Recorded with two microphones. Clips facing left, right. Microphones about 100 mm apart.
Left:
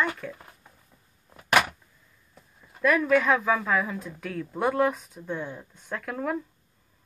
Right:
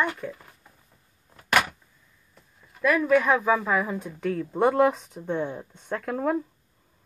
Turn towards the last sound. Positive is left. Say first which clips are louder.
# right 4 dB
turn(degrees=-30)  # may be behind; listen again after turning